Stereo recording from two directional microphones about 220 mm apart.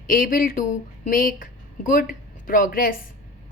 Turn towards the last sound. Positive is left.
turn(degrees=40)  # may be behind; listen again after turning